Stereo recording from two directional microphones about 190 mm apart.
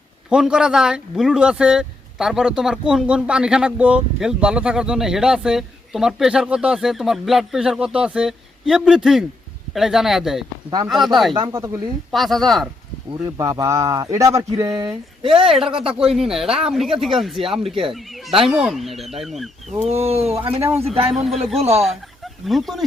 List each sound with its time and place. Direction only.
0.3 s speech: 5° right (ahead or behind)
11.3 s speech: 20° right (ahead or behind)
12.1 s speech: centre (ahead or behind)
13.2 s speech: 20° right (ahead or behind)
16.0 s speech: 5° right (ahead or behind)
20.0 s speech: 35° right (ahead or behind)
20.6 s speech: 15° right (ahead or behind)
20.8 s speech: 30° right (ahead or behind)
21.2 s speech: centre (ahead or behind)